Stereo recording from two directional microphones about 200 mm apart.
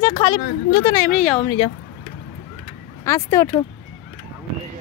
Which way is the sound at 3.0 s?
15° left (ahead or behind).